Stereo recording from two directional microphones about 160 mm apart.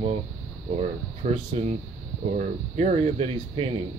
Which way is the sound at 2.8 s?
40° right (ahead or behind).